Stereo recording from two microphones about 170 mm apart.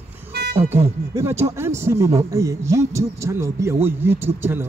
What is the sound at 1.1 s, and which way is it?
Speech, 15° right (ahead or behind).